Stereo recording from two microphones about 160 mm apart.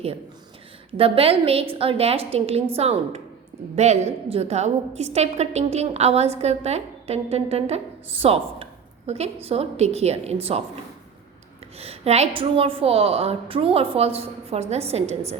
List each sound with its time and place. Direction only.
0.9 s a woman's voice: 35° right (ahead or behind)
11.8 s a woman's voice: 40° right (ahead or behind)